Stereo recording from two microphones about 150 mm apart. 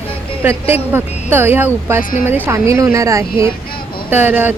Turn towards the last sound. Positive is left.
turn(degrees=-10)  # may be behind; listen again after turning